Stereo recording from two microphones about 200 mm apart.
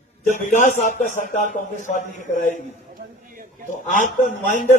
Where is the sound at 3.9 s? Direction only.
40° left (ahead or behind).